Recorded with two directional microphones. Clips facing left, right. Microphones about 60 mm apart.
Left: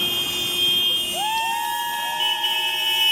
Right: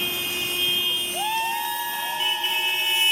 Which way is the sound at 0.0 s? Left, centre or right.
Right.